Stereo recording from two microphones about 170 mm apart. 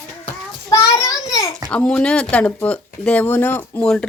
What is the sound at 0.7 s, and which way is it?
Child singing, 20° left (ahead or behind).